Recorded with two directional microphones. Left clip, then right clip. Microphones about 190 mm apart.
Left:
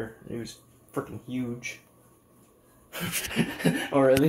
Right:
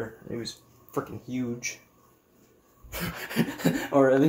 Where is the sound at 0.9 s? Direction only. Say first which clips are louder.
Right 1 dB; centre (ahead or behind).